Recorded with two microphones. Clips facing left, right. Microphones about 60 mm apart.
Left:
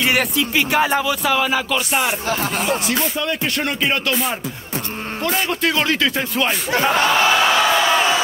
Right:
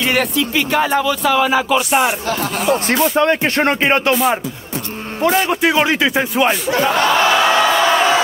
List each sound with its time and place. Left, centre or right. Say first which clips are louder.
0.0 s speech: right 2 dB; centre
1.9 s speech: right 5 dB; centre
2.6 s speech: right 5 dB; right
5.2 s a man's voice: right 6 dB; right
6.9 s battle cry: right 1 dB; centre
7.2 s speech: right 2 dB; right
7.5 s a sound: right 3 dB; right